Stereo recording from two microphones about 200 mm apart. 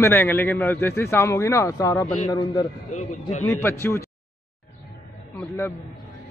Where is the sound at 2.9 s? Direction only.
35° left (ahead or behind).